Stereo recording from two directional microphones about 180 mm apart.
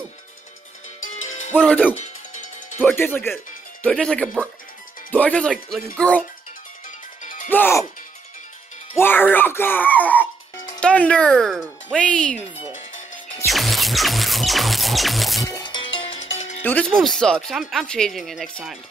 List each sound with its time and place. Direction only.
1.1 s music: 40° left (ahead or behind)
1.5 s speech: 5° left (ahead or behind)
2.0 s music: 45° left (ahead or behind)
2.8 s speech: 10° left (ahead or behind)
7.4 s speech: 10° left (ahead or behind)
8.9 s speech: 10° left (ahead or behind)
13.5 s music: centre (ahead or behind)
15.4 s music: 20° left (ahead or behind); by 16.6 s 40° left (ahead or behind)
16.6 s speech: 10° left (ahead or behind)